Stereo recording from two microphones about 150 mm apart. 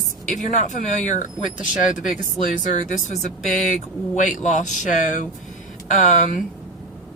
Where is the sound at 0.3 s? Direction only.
55° left (ahead or behind).